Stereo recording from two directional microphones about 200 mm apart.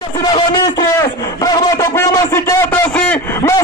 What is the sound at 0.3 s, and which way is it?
Speech, 20° left (ahead or behind).